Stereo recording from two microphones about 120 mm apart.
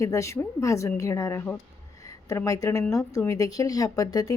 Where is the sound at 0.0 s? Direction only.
25° left (ahead or behind).